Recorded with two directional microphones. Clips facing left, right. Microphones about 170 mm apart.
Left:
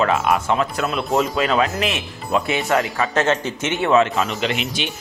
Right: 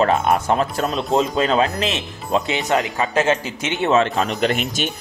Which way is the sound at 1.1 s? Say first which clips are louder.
Right 1 dB; 25° right (ahead or behind).